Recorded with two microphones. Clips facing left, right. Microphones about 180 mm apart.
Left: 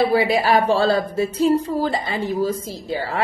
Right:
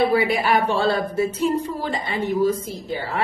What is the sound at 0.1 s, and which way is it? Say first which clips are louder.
A woman's voice: left 2 dB; 35° left (ahead or behind).